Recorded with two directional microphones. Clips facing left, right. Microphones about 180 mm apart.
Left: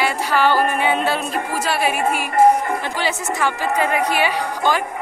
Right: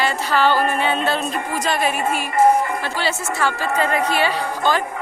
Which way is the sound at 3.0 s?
15° left (ahead or behind).